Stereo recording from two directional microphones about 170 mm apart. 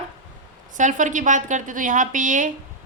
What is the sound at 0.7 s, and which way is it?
A woman's voice, 50° right (ahead or behind).